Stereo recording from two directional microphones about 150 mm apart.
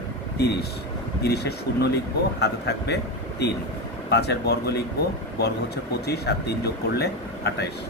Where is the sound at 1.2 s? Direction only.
90° left.